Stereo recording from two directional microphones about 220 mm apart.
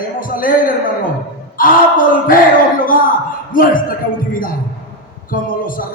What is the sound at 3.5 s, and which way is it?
A man's voice, 40° left (ahead or behind).